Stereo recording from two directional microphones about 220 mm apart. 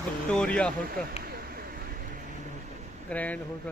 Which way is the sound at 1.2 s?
45° right (ahead or behind).